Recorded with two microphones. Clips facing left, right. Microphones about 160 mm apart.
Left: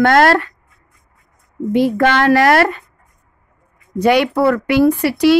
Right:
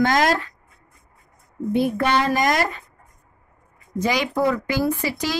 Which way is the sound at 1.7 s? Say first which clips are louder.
Left 6 dB; 90° left.